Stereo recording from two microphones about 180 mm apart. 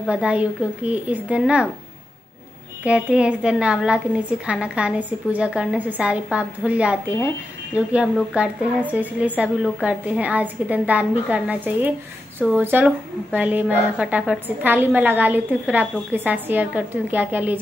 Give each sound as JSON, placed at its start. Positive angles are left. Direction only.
{"t": 0.0, "sound": "a woman's voice", "side_deg": -5}
{"t": 2.8, "sound": "a woman's voice", "side_deg": -5}